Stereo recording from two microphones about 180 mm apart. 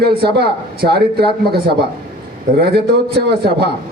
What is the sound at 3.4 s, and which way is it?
Speech, 65° right (ahead or behind).